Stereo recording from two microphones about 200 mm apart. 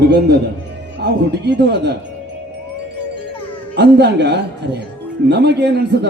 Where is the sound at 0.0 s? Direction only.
55° right (ahead or behind).